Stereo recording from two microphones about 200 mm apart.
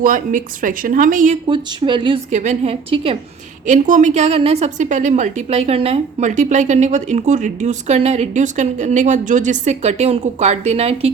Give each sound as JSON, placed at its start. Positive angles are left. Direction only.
{"t": 0.0, "sound": "a woman's voice", "side_deg": -40}
{"t": 1.5, "sound": "speech", "side_deg": -25}
{"t": 2.3, "sound": "a woman's voice", "side_deg": -35}
{"t": 3.7, "sound": "a woman's voice", "side_deg": -40}